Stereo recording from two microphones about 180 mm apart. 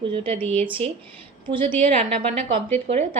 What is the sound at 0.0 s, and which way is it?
Speech, 30° right (ahead or behind).